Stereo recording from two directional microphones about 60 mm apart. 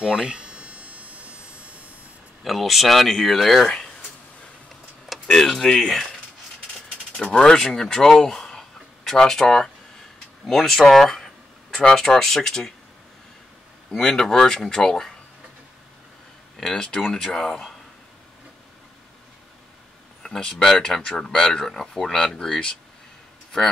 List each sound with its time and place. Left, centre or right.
0.0 s speech: centre
0.4 s a sound: right
2.4 s speech: centre
5.3 s speech: centre
7.2 s a sound: centre
11.8 s speech: centre
13.9 s speech: centre
16.5 s speech: centre
20.2 s speech: centre